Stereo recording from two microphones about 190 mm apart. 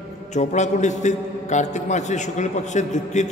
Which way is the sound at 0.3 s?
40° left (ahead or behind).